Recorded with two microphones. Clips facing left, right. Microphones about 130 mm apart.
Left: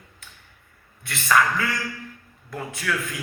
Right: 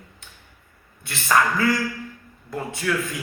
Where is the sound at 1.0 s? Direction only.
30° right (ahead or behind).